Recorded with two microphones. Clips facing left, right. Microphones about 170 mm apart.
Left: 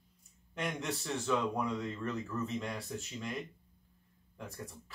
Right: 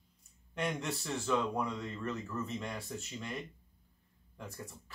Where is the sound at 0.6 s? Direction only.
Centre (ahead or behind).